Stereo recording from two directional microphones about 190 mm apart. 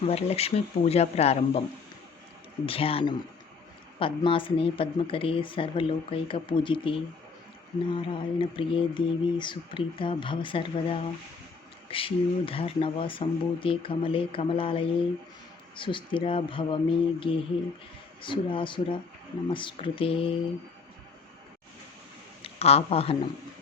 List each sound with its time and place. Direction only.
0.0 s speech: 30° left (ahead or behind)
2.6 s a woman's voice: 30° left (ahead or behind)
22.4 s speech: 30° left (ahead or behind)